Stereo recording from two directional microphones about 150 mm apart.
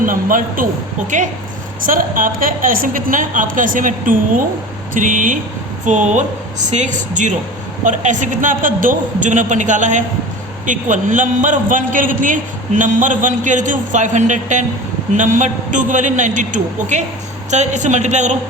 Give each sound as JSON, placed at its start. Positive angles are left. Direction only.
{"t": 0.0, "sound": "a man's voice", "side_deg": -65}
{"t": 1.1, "sound": "a man's voice", "side_deg": -55}
{"t": 1.8, "sound": "a man's voice", "side_deg": -65}